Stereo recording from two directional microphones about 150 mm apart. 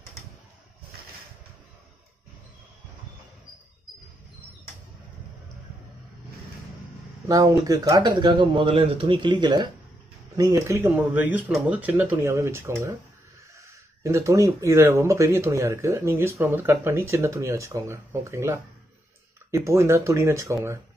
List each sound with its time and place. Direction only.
7.2 s speech: 25° right (ahead or behind)